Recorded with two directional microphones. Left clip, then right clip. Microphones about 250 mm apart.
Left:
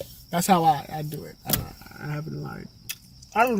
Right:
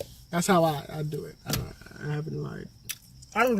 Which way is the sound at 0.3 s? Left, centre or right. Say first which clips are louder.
Left 2 dB; centre.